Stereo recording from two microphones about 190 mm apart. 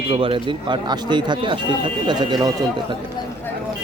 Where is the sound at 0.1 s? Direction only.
25° right (ahead or behind).